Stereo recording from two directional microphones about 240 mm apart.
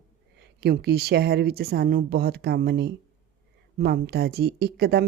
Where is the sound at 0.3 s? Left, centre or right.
Right.